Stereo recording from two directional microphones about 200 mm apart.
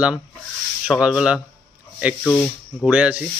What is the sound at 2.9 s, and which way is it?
Speech, 5° right (ahead or behind).